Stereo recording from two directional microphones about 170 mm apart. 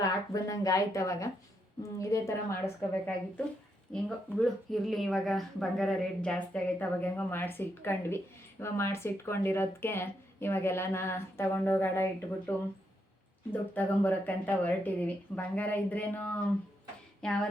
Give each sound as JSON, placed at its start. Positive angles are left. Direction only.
{"t": 0.0, "sound": "speech", "side_deg": 20}
{"t": 13.5, "sound": "speech", "side_deg": 10}